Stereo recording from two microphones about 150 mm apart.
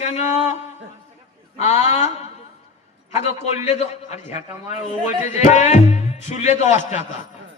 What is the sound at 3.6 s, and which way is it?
Speech, 50° left (ahead or behind).